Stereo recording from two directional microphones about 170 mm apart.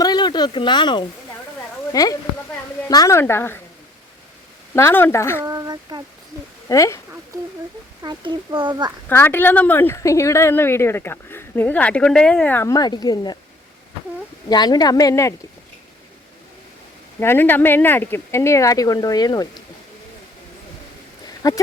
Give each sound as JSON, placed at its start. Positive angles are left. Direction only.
{"t": 0.0, "sound": "a sound", "side_deg": 25}
{"t": 1.9, "sound": "speech", "side_deg": 20}
{"t": 4.7, "sound": "speech", "side_deg": 15}
{"t": 5.5, "sound": "speech", "side_deg": -20}
{"t": 6.7, "sound": "speech", "side_deg": 20}
{"t": 8.0, "sound": "a child's voice", "side_deg": -25}
{"t": 9.0, "sound": "speech", "side_deg": 10}
{"t": 14.5, "sound": "speech", "side_deg": 25}
{"t": 17.2, "sound": "speech", "side_deg": 10}
{"t": 21.4, "sound": "speech", "side_deg": 20}